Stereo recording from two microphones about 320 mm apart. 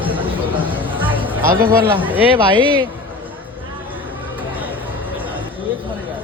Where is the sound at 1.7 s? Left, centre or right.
Centre.